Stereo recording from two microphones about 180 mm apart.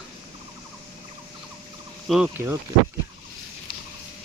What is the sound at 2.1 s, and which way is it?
Speech, 5° right (ahead or behind).